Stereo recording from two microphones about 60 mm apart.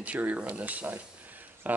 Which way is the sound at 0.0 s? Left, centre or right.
Right.